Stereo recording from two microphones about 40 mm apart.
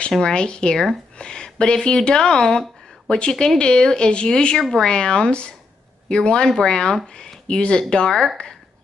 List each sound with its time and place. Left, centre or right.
0.2 s speech: left